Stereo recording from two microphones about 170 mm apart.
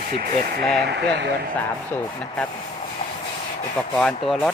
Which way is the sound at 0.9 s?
80° right.